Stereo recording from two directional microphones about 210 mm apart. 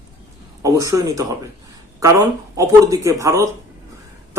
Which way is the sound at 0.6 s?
15° right (ahead or behind).